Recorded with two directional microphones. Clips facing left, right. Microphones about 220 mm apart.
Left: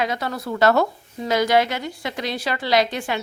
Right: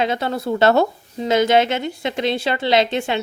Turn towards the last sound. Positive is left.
turn(degrees=-25)  # may be behind; listen again after turning